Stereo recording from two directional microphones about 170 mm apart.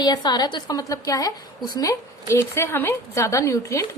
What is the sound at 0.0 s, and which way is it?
A woman's voice, 25° left (ahead or behind).